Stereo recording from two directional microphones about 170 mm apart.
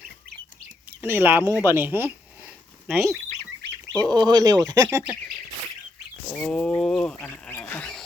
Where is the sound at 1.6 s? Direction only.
15° right (ahead or behind).